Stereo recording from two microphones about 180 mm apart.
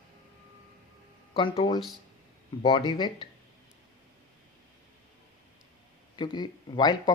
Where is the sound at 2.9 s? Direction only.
25° left (ahead or behind).